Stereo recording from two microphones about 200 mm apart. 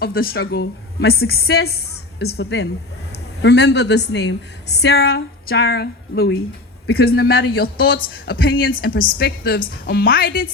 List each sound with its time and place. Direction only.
0.0 s a woman's voice: 50° left (ahead or behind)